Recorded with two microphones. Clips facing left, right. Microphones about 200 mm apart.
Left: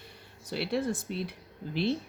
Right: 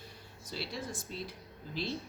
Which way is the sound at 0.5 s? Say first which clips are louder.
Left 10 dB; 60° left (ahead or behind).